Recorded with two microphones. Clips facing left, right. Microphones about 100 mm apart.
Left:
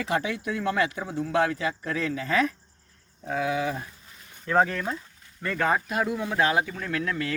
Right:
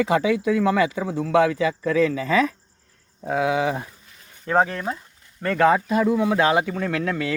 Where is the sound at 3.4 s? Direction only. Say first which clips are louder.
Right 5 dB; 90° right.